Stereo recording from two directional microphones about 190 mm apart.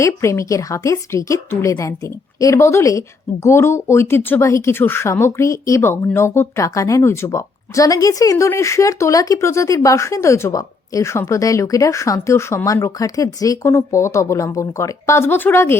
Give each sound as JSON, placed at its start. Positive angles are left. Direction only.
{"t": 0.0, "sound": "speech", "side_deg": 15}